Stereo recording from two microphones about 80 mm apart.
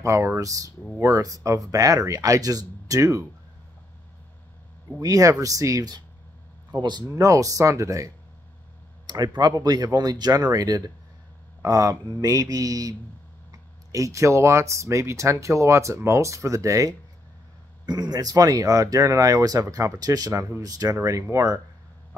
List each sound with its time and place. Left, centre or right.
0.0 s speech: right
5.0 s speech: right
6.7 s speech: right
7.2 s speech: right
9.0 s a sound: right
9.4 s speech: right
13.9 s speech: right
17.8 s speech: right